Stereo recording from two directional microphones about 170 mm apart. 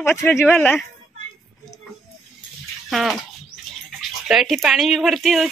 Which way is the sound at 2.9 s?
Centre (ahead or behind).